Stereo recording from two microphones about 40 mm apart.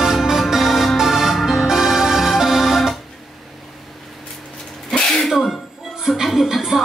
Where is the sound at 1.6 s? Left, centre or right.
Centre.